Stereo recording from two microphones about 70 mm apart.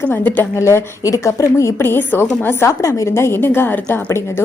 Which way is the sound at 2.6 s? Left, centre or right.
Left.